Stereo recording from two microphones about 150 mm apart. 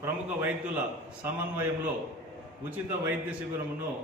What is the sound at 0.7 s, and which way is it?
Speech, 10° right (ahead or behind).